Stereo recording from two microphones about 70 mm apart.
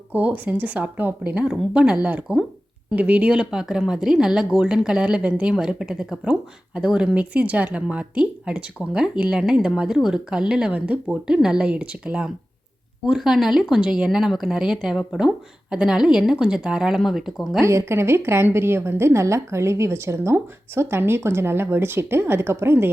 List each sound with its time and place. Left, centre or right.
0.1 s speech: right; by 17.6 s centre
17.6 s a woman's voice: right